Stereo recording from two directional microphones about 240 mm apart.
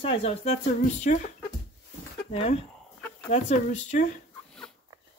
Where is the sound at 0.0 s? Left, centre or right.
Left.